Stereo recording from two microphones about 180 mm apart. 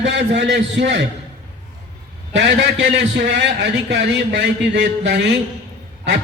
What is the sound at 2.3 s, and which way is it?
A man's voice, 75° right (ahead or behind).